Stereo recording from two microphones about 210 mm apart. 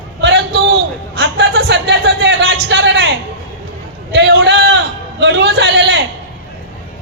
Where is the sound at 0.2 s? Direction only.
55° right (ahead or behind).